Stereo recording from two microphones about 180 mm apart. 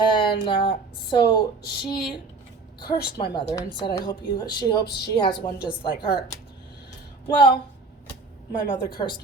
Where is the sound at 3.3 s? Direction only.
20° left (ahead or behind).